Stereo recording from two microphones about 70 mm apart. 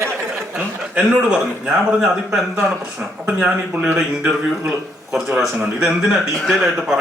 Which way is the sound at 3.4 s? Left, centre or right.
Right.